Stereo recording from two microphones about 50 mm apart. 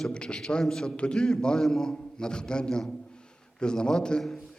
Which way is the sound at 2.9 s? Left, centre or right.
Centre.